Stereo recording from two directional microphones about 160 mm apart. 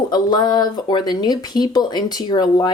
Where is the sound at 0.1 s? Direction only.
25° left (ahead or behind).